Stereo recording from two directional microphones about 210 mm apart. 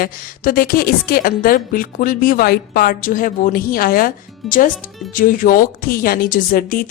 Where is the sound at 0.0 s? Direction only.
45° left (ahead or behind).